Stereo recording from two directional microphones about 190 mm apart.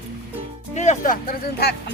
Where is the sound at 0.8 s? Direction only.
40° left (ahead or behind).